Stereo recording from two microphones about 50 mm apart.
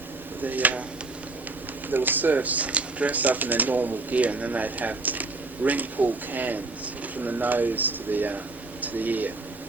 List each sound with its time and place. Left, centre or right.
0.4 s speech: right
1.9 s speech: right